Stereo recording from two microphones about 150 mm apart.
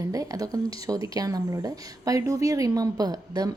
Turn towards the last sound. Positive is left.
turn(degrees=-25)  # may be behind; listen again after turning